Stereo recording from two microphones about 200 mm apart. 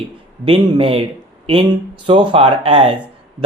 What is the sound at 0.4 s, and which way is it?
Speech, 25° right (ahead or behind).